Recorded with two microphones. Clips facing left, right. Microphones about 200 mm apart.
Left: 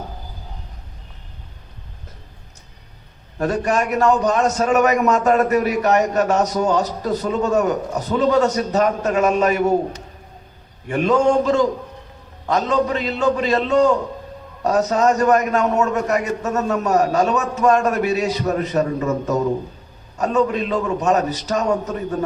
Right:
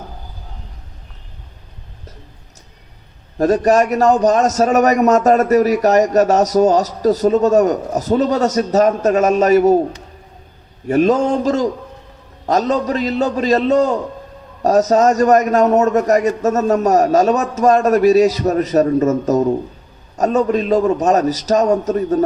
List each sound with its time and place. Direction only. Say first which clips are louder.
3.3 s a man's voice: right 7 dB; 40° right (ahead or behind)
10.8 s a man's voice: right 3 dB; 40° right (ahead or behind)